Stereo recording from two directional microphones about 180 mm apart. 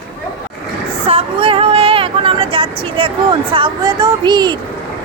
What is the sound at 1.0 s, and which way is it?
Speech, 30° right (ahead or behind).